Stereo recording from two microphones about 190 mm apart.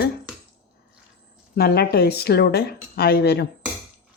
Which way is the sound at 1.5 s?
55° left (ahead or behind).